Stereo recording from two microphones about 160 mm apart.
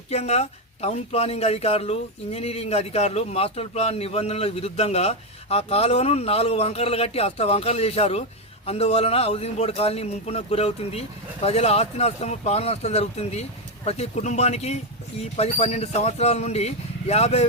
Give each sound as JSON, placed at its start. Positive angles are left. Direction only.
{"t": 0.1, "sound": "speech", "side_deg": 40}